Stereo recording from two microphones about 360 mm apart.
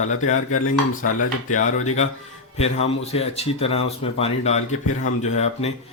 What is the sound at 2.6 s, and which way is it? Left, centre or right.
Speech, centre.